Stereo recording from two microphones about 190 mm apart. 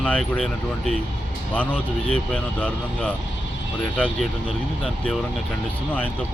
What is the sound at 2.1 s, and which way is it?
Speech, 5° left (ahead or behind).